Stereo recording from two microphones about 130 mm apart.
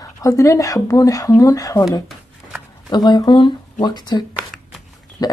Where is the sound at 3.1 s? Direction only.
35° left (ahead or behind).